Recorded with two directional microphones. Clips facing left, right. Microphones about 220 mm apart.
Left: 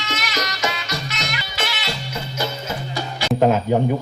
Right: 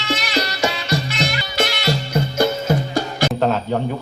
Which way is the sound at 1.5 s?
45° right (ahead or behind).